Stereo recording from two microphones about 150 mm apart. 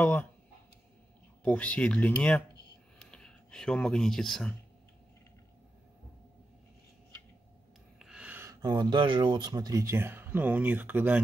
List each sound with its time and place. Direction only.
0.0 s speech: 10° left (ahead or behind)
1.4 s speech: 10° left (ahead or behind)
8.0 s a sound: 5° right (ahead or behind)
8.6 s speech: 30° right (ahead or behind); by 11.1 s 10° right (ahead or behind)